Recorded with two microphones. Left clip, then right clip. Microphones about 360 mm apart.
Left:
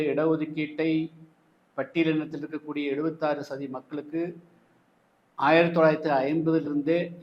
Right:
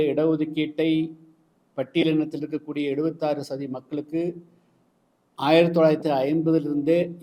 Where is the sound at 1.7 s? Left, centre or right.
Right.